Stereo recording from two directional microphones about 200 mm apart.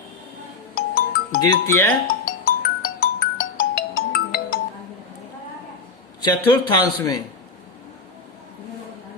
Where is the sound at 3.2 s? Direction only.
45° left (ahead or behind).